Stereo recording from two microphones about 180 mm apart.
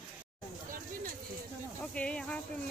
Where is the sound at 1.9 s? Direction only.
5° left (ahead or behind).